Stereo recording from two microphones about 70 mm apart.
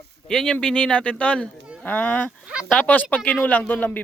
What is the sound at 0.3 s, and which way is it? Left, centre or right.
Speech, centre.